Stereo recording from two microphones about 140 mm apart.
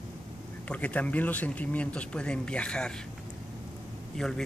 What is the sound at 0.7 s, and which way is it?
A man's voice, 10° left (ahead or behind).